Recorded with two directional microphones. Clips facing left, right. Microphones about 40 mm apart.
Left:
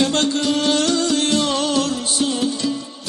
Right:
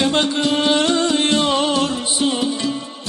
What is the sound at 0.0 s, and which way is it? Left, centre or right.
Music, right.